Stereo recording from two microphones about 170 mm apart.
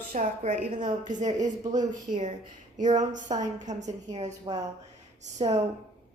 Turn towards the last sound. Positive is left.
turn(degrees=-40)  # may be behind; listen again after turning